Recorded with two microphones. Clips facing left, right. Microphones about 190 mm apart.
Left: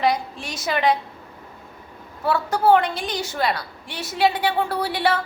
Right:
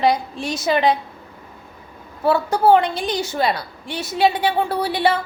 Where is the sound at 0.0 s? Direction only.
30° right (ahead or behind).